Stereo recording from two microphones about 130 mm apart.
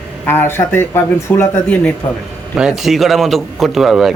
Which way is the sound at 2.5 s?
5° right (ahead or behind).